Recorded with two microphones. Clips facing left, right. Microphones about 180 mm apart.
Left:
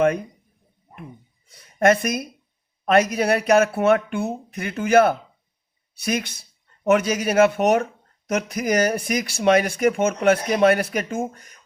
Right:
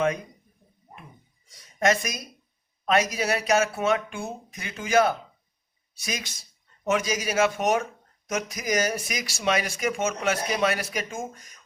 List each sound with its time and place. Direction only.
1.5 s speech: 55° left (ahead or behind)